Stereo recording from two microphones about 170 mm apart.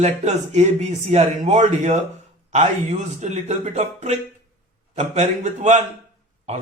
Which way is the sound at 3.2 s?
40° right (ahead or behind).